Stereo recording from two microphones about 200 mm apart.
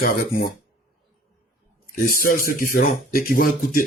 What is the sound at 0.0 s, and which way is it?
Speech, 45° left (ahead or behind).